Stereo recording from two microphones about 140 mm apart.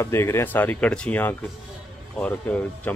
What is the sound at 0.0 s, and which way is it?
Speech, 20° left (ahead or behind).